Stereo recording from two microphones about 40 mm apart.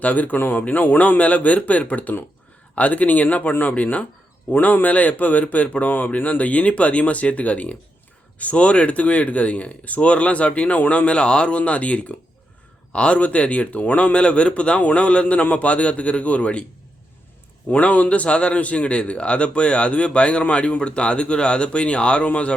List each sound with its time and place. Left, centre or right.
0.0 s speech: left
17.7 s a man's voice: left